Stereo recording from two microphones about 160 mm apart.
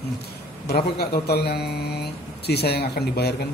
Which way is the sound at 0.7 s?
80° left.